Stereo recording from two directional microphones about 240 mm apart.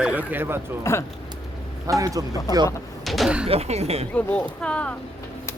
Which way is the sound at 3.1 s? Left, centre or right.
Centre.